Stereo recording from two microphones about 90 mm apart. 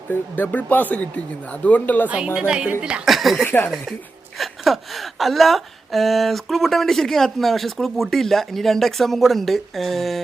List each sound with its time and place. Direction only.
0.1 s speech: 25° left (ahead or behind)
2.0 s speech: 10° right (ahead or behind)
3.1 s a woman's voice: centre (ahead or behind)
3.4 s speech: 25° left (ahead or behind)
4.4 s a woman's voice: centre (ahead or behind)